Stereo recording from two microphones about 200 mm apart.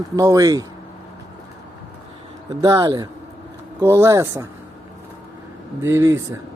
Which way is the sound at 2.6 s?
15° right (ahead or behind).